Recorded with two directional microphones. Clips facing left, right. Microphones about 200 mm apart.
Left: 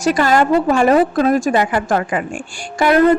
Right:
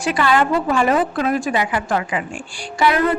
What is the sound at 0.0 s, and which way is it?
Speech, 45° left (ahead or behind).